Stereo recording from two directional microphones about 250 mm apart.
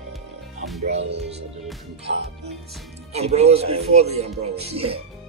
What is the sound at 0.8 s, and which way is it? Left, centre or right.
Speech, right.